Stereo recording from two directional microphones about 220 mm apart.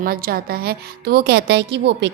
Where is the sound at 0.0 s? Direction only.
40° right (ahead or behind).